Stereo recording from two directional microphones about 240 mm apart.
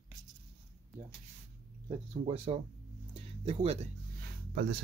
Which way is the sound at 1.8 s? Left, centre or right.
Right.